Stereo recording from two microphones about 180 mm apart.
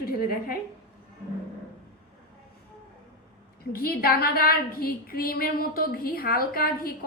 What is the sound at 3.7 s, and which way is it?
A woman's voice, 55° left (ahead or behind).